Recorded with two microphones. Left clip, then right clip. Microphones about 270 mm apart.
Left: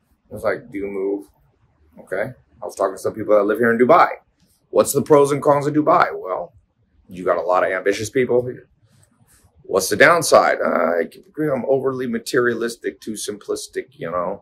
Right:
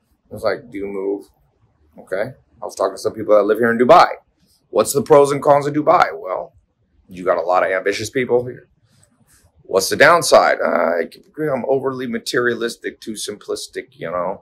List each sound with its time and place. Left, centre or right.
0.3 s speech: centre